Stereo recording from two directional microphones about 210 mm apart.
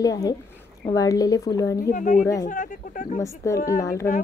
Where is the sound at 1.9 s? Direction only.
40° left (ahead or behind).